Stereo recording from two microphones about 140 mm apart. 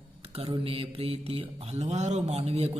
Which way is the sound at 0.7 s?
45° right (ahead or behind).